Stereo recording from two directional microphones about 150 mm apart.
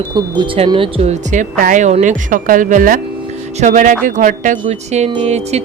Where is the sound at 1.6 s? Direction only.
60° right (ahead or behind).